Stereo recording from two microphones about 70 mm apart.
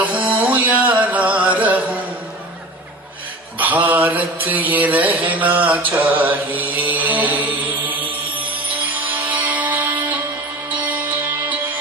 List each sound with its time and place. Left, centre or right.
0.0 s music: right
3.6 s mantra: right
9.0 s music: right